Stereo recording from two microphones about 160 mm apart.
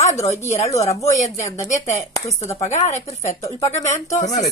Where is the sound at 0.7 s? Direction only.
20° left (ahead or behind).